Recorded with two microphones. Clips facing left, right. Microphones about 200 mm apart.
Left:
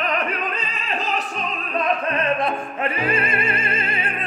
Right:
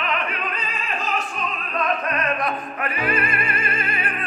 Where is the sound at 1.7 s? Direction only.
25° left (ahead or behind).